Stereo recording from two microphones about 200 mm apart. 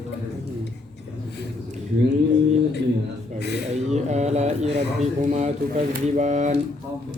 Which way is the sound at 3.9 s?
35° right (ahead or behind).